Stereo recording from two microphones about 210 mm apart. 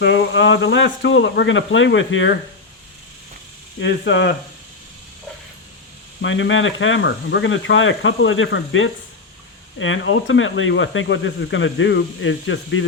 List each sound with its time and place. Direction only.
0.0 s speech: 60° left (ahead or behind)
3.8 s speech: 55° left (ahead or behind)
6.2 s speech: 65° left (ahead or behind)